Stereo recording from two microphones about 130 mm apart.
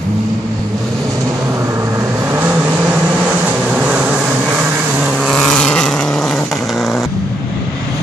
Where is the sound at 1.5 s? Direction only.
20° right (ahead or behind); by 7.1 s centre (ahead or behind).